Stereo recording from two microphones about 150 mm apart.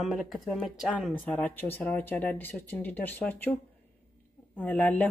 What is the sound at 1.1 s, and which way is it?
Speech, 10° left (ahead or behind).